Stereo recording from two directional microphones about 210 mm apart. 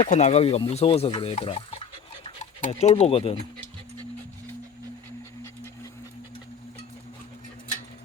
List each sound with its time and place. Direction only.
0.0 s speech: 30° left (ahead or behind)